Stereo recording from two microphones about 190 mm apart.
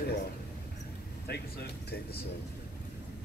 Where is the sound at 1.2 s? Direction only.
60° left (ahead or behind).